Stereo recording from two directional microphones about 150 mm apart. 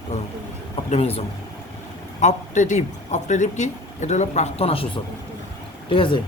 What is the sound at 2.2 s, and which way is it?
Speech, 55° left (ahead or behind).